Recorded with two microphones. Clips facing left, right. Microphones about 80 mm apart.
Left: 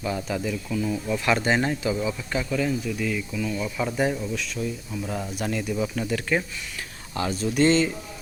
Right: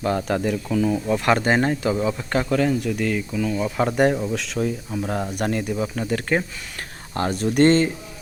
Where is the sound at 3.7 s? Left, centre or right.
Right.